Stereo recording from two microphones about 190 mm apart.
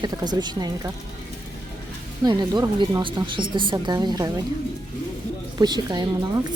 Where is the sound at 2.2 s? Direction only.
20° right (ahead or behind).